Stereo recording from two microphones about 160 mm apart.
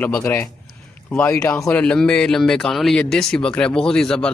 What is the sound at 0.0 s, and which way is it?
Speech, 15° left (ahead or behind).